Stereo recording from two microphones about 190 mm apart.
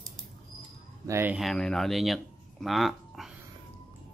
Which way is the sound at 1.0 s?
10° right (ahead or behind).